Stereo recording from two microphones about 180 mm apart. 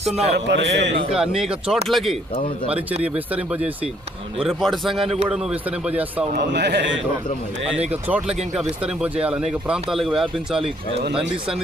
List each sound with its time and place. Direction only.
0.3 s a man's voice: 70° right (ahead or behind)
1.1 s speech: centre (ahead or behind)
6.3 s a man's voice: 70° right (ahead or behind)
8.0 s speech: 5° right (ahead or behind)